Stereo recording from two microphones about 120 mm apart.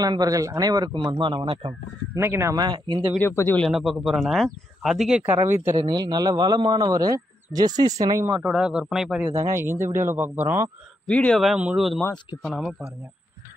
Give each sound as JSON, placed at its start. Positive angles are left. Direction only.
{"t": 0.0, "sound": "a man's voice", "side_deg": -30}
{"t": 2.1, "sound": "a man's voice", "side_deg": -20}
{"t": 3.2, "sound": "speech", "side_deg": 20}
{"t": 3.6, "sound": "speech", "side_deg": 0}
{"t": 5.8, "sound": "a man's voice", "side_deg": -35}
{"t": 8.5, "sound": "speech", "side_deg": -5}
{"t": 9.2, "sound": "a man's voice", "side_deg": -20}
{"t": 11.1, "sound": "speech", "side_deg": 10}
{"t": 11.4, "sound": "speech", "side_deg": -5}